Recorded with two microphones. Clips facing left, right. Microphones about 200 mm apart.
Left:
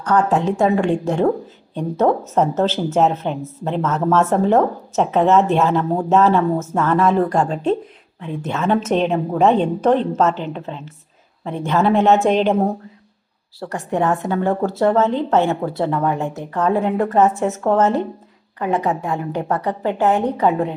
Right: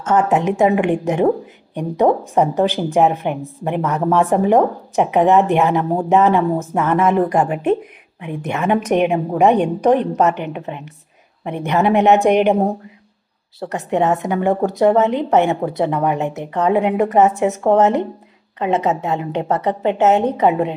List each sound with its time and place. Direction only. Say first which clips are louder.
0.0 s a woman's voice: right 1 dB; 20° right (ahead or behind)